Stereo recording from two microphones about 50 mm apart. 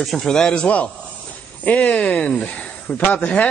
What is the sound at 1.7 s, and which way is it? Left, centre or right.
A man's voice, left.